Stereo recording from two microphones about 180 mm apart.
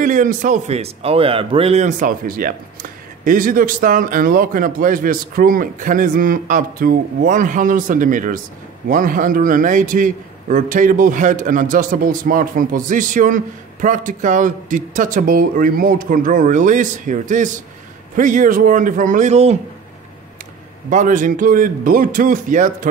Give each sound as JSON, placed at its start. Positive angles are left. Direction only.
{"t": 0.0, "sound": "a man's voice", "side_deg": -45}
{"t": 20.9, "sound": "a man's voice", "side_deg": -45}